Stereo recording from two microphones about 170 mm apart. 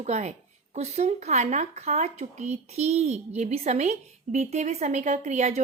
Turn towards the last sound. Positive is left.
turn(degrees=-40)  # may be behind; listen again after turning